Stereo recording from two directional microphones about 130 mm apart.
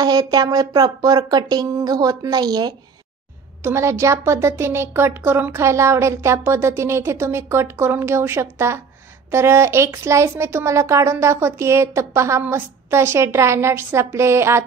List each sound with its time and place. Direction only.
0.0 s speech: 30° right (ahead or behind)
3.6 s speech: 20° right (ahead or behind)